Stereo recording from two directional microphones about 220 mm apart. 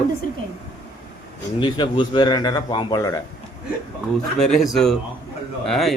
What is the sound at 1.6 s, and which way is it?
Speech, 20° left (ahead or behind).